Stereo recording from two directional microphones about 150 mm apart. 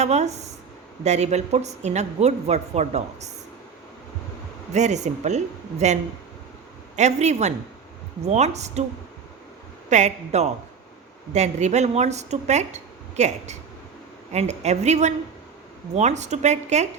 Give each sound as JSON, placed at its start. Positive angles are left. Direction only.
{"t": 0.0, "sound": "speech", "side_deg": -50}
{"t": 4.7, "sound": "speech", "side_deg": -50}
{"t": 9.9, "sound": "speech", "side_deg": -50}